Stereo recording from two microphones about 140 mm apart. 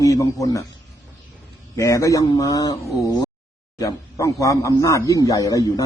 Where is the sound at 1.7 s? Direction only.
20° left (ahead or behind).